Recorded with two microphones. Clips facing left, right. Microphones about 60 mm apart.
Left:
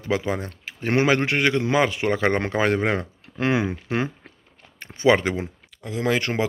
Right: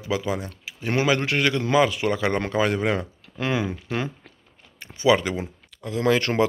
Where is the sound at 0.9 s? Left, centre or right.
Left.